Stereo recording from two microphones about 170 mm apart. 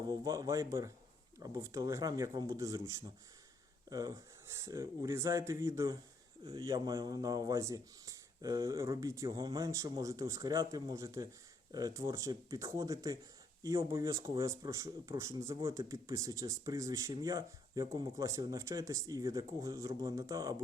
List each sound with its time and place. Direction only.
0.1 s speech: 20° right (ahead or behind)